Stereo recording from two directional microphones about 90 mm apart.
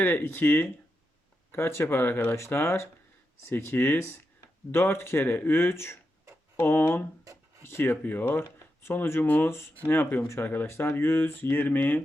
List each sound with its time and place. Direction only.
0.0 s speech: 20° left (ahead or behind)